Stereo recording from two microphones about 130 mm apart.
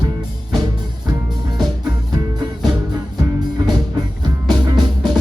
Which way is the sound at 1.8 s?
30° right (ahead or behind).